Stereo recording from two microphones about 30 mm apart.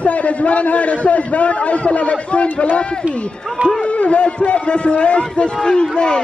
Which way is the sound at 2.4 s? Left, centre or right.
Left.